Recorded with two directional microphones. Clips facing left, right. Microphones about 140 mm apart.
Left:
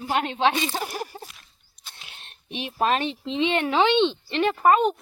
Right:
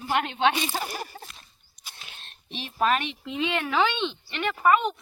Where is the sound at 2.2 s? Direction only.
15° left (ahead or behind).